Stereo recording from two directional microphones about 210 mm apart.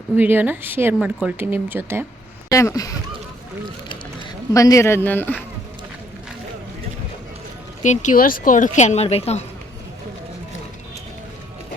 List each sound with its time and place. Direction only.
0.2 s speech: 10° right (ahead or behind)
2.5 s a man's voice: 15° left (ahead or behind)
4.5 s a man's voice: 15° left (ahead or behind)
7.8 s speech: 35° left (ahead or behind)